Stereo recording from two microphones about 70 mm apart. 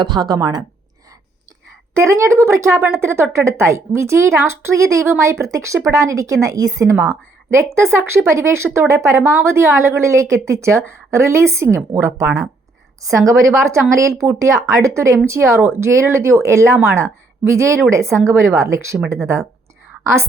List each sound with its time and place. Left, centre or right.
0.0 s speech: right
1.9 s a woman's voice: right
7.5 s a woman's voice: right
11.9 s a woman's voice: right